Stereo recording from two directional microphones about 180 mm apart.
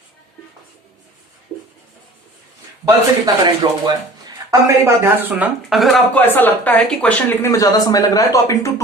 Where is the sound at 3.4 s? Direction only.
25° right (ahead or behind).